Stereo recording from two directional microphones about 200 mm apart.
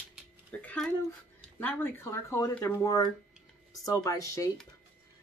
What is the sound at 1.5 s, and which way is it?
Speech, 10° left (ahead or behind).